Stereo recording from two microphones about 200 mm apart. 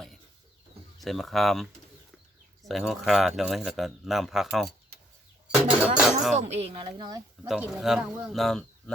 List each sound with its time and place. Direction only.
0.9 s speech: centre (ahead or behind)
2.6 s speech: centre (ahead or behind)
5.8 s a sound: 5° right (ahead or behind)
6.3 s speech: 35° right (ahead or behind)
7.4 s speech: centre (ahead or behind)